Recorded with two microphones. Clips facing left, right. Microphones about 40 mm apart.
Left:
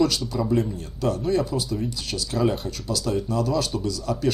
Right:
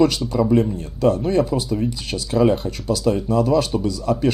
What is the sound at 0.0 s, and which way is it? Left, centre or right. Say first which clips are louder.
Speech: right 5 dB; right.